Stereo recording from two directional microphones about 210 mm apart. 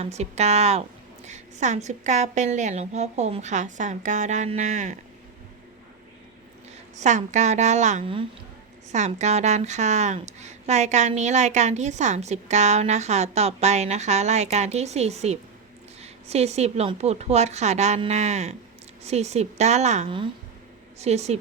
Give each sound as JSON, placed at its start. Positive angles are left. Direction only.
{"t": 0.0, "sound": "a woman's voice", "side_deg": -30}
{"t": 7.0, "sound": "a woman's voice", "side_deg": -35}